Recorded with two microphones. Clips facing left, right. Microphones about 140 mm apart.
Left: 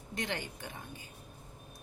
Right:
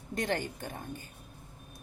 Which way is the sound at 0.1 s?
45° right (ahead or behind).